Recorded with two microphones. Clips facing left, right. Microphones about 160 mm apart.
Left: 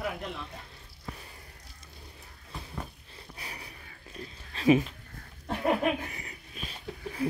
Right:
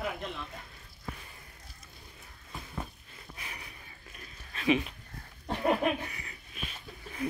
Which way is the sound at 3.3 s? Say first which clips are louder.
Left 2 dB; 35° left (ahead or behind).